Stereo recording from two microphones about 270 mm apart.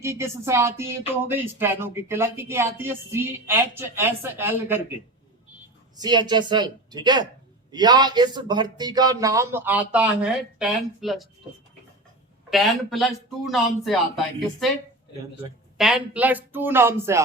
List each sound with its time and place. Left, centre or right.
0.0 s speech: centre
6.0 s speech: centre
12.5 s speech: centre
15.8 s speech: centre